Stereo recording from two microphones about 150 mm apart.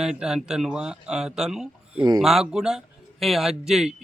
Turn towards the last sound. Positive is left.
turn(degrees=-5)  # may be behind; listen again after turning